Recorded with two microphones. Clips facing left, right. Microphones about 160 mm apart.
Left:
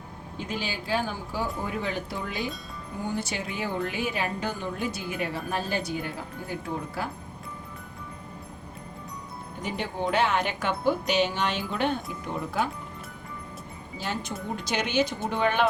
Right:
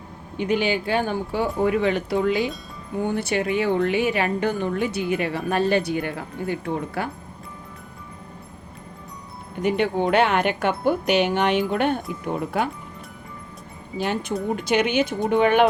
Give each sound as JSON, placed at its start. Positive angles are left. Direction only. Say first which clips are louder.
{"t": 0.3, "sound": "a woman's voice", "louder": "right 11 dB", "side_deg": -65}
{"t": 3.0, "sound": "a woman's voice", "louder": "right 8 dB", "side_deg": -60}
{"t": 9.6, "sound": "speech", "louder": "right 10 dB", "side_deg": -65}
{"t": 14.0, "sound": "speech", "louder": "right 8 dB", "side_deg": -55}